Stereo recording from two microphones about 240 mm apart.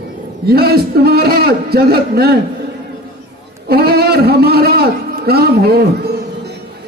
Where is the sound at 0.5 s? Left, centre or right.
Right.